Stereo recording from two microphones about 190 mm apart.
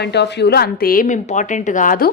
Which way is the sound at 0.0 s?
60° left (ahead or behind).